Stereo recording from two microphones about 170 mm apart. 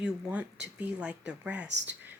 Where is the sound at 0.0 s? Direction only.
5° right (ahead or behind).